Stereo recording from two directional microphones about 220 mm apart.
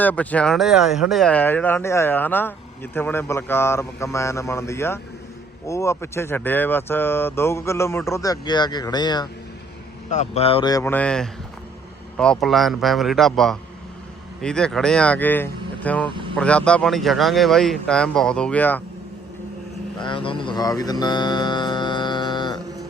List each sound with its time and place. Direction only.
0.0 s speech: 5° left (ahead or behind)
10.1 s speech: 30° left (ahead or behind); by 18.8 s 5° left (ahead or behind)
20.0 s speech: 20° left (ahead or behind)